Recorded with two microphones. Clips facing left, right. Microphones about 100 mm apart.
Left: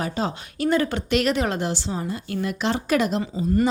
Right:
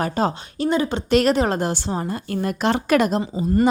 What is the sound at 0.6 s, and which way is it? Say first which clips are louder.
Speech: right 1 dB; 20° right (ahead or behind).